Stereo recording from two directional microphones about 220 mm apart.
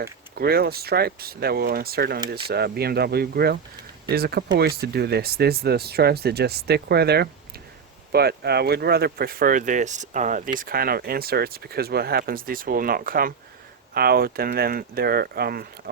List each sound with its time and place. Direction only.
0.3 s speech: 45° right (ahead or behind)